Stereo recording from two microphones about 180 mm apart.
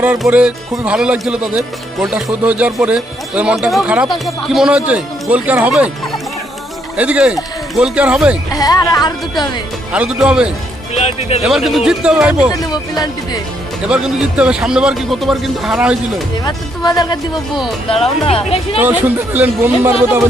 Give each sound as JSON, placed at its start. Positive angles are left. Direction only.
{"t": 0.0, "sound": "speech", "side_deg": -5}
{"t": 6.9, "sound": "a man's voice", "side_deg": -5}
{"t": 8.5, "sound": "speech", "side_deg": 20}
{"t": 9.9, "sound": "a man's voice", "side_deg": -5}
{"t": 10.9, "sound": "speech", "side_deg": 35}
{"t": 11.4, "sound": "a man's voice", "side_deg": 0}
{"t": 12.5, "sound": "speech", "side_deg": 20}
{"t": 13.8, "sound": "a man's voice", "side_deg": -5}
{"t": 16.4, "sound": "speech", "side_deg": 20}
{"t": 17.8, "sound": "speech", "side_deg": 35}
{"t": 18.8, "sound": "speech", "side_deg": -10}